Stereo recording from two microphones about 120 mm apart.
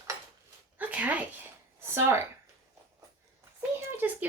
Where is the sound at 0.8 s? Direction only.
10° right (ahead or behind).